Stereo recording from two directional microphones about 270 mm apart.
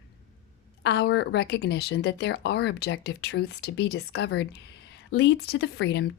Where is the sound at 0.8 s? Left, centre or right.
Left.